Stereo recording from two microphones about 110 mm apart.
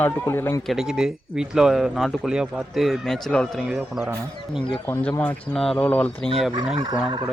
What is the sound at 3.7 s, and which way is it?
Speech, 5° right (ahead or behind).